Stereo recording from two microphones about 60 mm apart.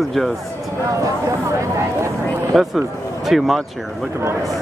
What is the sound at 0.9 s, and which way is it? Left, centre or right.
Speech, right.